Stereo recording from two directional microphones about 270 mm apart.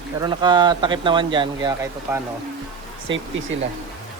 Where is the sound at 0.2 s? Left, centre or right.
Centre.